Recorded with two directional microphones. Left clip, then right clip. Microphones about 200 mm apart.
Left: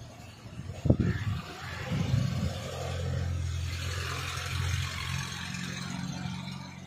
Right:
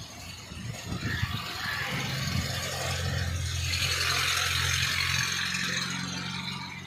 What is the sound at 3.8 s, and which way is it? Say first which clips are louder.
Vehicle: right 9 dB; 55° left (ahead or behind).